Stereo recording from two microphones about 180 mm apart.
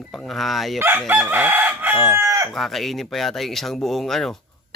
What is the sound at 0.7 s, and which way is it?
Chicken, 10° right (ahead or behind).